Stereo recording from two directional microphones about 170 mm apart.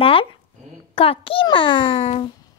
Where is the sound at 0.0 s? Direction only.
35° left (ahead or behind).